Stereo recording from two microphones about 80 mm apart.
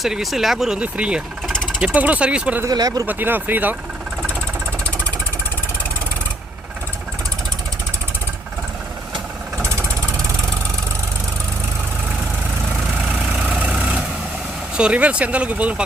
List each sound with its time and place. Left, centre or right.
0.0 s speech: centre
0.8 s speech: centre
2.6 s speech: right
3.1 s speech: right
9.6 s vehicle: right
13.0 s vehicle: centre
14.8 s speech: centre